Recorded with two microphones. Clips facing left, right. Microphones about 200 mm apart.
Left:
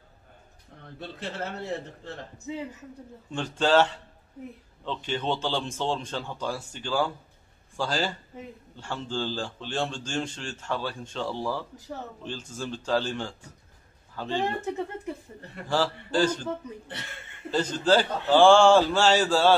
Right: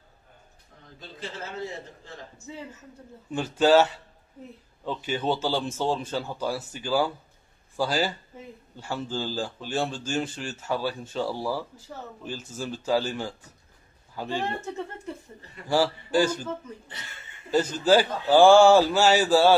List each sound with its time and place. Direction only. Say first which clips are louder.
0.9 s a man's voice: left 3 dB; 65° left (ahead or behind)
2.4 s speech: left 6 dB; 15° left (ahead or behind)
3.3 s a man's voice: right 4 dB; 10° right (ahead or behind)
14.4 s speech: left 2 dB; 15° left (ahead or behind)
15.7 s a man's voice: right 3 dB; 10° right (ahead or behind)
17.5 s a man's voice: right 2 dB; 10° right (ahead or behind)